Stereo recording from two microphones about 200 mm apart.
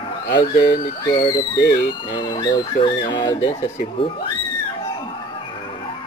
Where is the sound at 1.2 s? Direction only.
20° left (ahead or behind).